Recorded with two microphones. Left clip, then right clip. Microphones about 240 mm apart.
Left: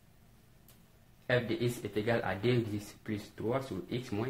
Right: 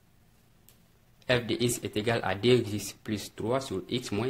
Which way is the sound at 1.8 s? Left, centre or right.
Right.